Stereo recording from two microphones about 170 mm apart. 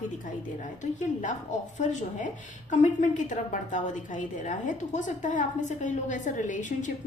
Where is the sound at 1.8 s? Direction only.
45° left (ahead or behind).